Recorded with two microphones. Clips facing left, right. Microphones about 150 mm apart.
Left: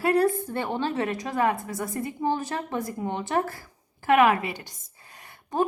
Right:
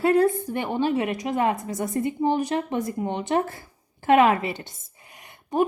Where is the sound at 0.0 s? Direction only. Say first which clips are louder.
Right 3 dB; 20° right (ahead or behind).